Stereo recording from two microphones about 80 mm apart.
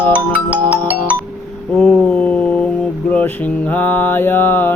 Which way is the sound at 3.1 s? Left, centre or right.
Left.